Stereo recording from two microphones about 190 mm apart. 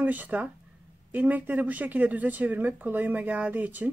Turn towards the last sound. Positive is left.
turn(degrees=-10)  # may be behind; listen again after turning